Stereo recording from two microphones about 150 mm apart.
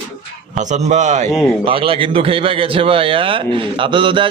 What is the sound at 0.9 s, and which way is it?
Speech, 50° right (ahead or behind).